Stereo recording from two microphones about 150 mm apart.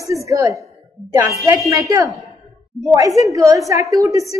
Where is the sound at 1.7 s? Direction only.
20° right (ahead or behind).